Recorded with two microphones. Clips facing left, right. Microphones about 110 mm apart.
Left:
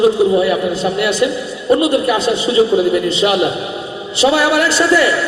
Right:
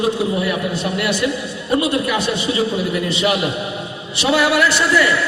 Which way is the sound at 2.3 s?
30° left (ahead or behind).